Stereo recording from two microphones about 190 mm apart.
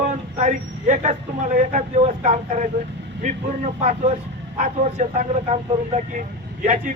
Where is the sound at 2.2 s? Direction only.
40° right (ahead or behind).